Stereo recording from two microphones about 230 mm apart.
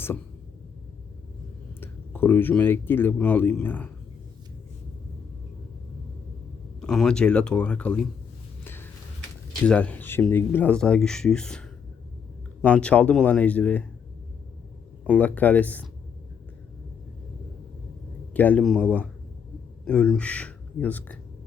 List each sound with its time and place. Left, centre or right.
1.8 s speech: centre
6.8 s speech: centre
8.6 s a sound: centre
9.6 s speech: centre
12.6 s speech: centre
15.0 s speech: centre
18.3 s speech: centre